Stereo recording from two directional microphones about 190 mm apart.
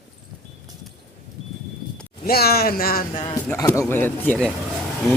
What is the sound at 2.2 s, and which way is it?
Speech, 55° left (ahead or behind).